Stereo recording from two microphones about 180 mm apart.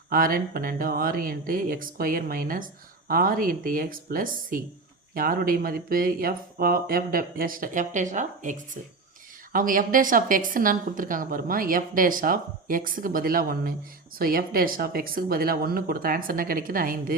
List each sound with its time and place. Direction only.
0.1 s a woman's voice: 50° right (ahead or behind)